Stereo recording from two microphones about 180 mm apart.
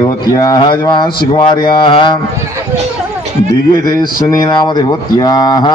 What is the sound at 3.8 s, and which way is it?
Speech, 20° left (ahead or behind).